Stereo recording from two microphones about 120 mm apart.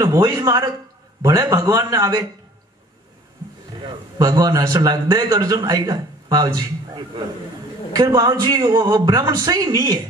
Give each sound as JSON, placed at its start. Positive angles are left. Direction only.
{"t": 0.0, "sound": "a man's voice", "side_deg": -30}
{"t": 4.2, "sound": "a man's voice", "side_deg": -35}